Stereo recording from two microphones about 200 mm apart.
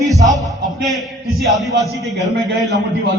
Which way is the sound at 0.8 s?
Centre (ahead or behind).